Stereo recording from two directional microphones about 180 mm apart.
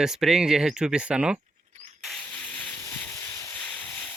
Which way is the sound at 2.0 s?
Centre (ahead or behind).